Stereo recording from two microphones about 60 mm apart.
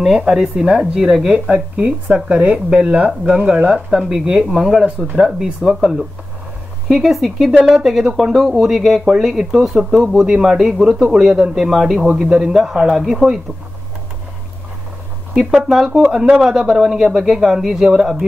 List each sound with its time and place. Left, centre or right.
0.0 s speech: centre
15.3 s speech: centre